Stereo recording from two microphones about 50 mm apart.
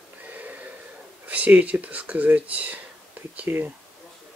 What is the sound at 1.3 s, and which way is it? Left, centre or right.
Speech, right.